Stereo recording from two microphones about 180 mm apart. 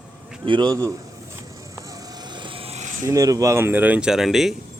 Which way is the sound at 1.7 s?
20° right (ahead or behind).